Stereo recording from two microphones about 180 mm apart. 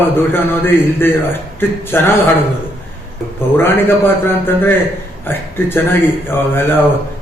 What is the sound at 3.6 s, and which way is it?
A man's voice, 10° left (ahead or behind).